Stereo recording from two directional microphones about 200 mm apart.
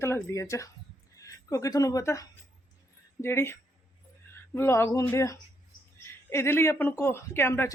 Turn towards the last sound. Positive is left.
turn(degrees=10)  # may be behind; listen again after turning